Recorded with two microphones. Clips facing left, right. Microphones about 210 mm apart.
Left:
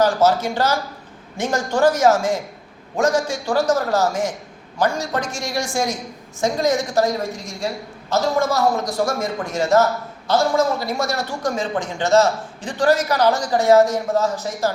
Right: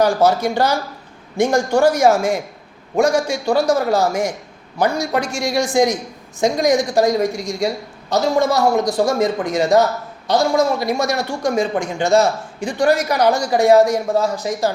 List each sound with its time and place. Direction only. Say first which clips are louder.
0.0 s a man's voice: right 2 dB; 15° right (ahead or behind)